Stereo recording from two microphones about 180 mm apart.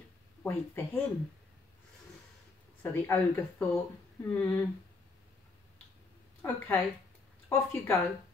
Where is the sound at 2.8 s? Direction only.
10° left (ahead or behind).